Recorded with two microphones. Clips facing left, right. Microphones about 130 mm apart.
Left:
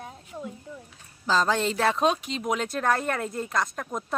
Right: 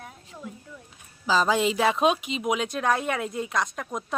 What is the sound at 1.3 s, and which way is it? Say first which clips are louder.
Speech: right 2 dB; 5° right (ahead or behind).